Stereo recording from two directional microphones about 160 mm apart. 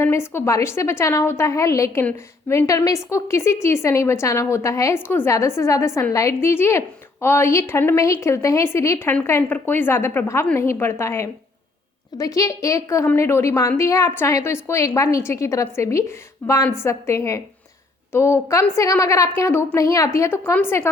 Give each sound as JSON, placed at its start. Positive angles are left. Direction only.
{"t": 0.0, "sound": "a woman's voice", "side_deg": 15}